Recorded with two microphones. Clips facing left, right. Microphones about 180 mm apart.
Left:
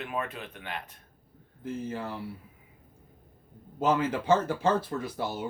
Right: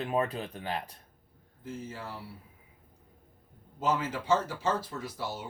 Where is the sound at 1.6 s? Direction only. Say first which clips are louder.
Left 6 dB; 55° left (ahead or behind).